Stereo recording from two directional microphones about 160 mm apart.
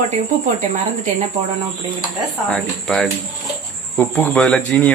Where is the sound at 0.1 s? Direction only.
45° right (ahead or behind).